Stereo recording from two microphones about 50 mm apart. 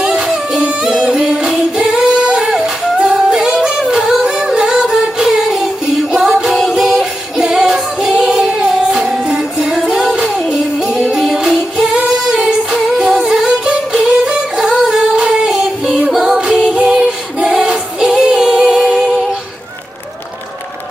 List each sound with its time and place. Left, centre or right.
0.0 s singing: centre
6.6 s music: centre